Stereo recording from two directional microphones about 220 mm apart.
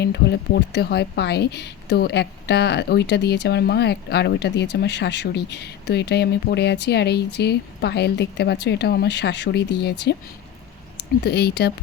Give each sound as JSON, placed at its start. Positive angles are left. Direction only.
{"t": 0.0, "sound": "a woman's voice", "side_deg": 50}
{"t": 11.2, "sound": "a woman's voice", "side_deg": 50}